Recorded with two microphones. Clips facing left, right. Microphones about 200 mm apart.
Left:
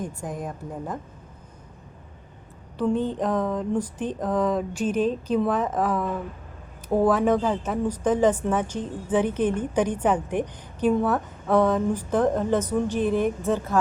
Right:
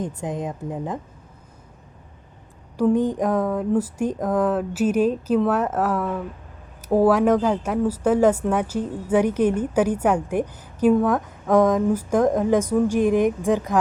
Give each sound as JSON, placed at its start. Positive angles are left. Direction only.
{"t": 0.0, "sound": "a woman's voice", "side_deg": -20}
{"t": 2.7, "sound": "a woman's voice", "side_deg": -10}